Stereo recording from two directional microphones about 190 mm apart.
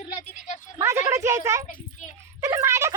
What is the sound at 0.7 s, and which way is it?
A woman's voice, 15° right (ahead or behind).